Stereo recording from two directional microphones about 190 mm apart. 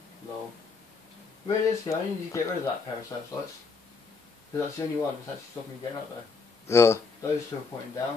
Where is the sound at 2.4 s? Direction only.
15° left (ahead or behind).